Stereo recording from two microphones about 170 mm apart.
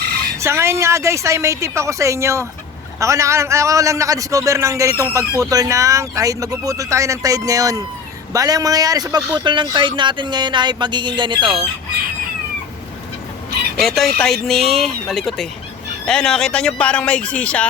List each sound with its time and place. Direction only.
0.3 s a woman's voice: 15° right (ahead or behind)
13.8 s speech: centre (ahead or behind)